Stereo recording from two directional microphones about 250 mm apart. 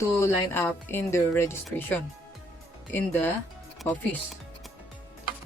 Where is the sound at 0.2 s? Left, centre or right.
Centre.